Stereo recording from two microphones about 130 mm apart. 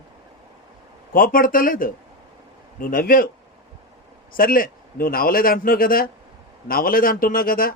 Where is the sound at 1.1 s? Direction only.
90° left.